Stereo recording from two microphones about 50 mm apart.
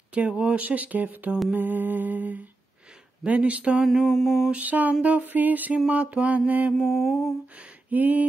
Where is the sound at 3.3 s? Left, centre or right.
Right.